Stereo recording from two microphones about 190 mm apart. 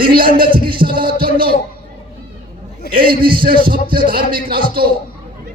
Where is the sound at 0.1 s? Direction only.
50° right (ahead or behind).